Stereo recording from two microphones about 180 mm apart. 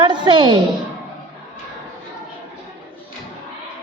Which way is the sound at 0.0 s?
25° right (ahead or behind).